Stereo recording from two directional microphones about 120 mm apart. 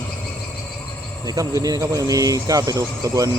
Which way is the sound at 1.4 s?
30° right (ahead or behind).